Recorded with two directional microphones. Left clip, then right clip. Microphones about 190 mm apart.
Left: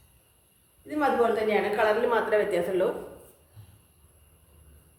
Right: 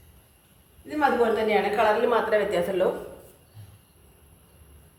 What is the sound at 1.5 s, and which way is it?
A woman's voice, 10° left (ahead or behind).